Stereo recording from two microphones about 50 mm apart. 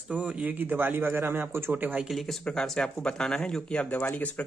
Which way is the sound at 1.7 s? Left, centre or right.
Right.